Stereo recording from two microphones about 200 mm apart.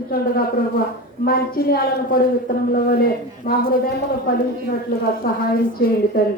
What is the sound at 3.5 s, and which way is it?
Speech, 45° left (ahead or behind).